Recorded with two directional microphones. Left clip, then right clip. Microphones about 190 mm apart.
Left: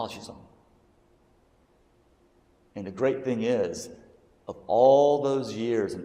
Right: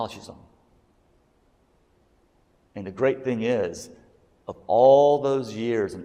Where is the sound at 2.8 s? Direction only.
40° right (ahead or behind).